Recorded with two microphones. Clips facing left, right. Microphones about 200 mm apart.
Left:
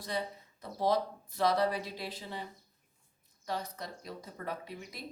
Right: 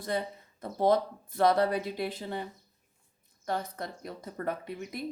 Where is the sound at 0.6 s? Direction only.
55° right (ahead or behind).